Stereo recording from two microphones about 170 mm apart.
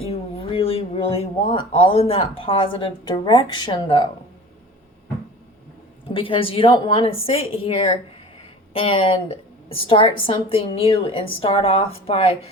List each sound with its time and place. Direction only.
0.0 s speech: 35° left (ahead or behind)
6.1 s a woman's voice: 30° left (ahead or behind)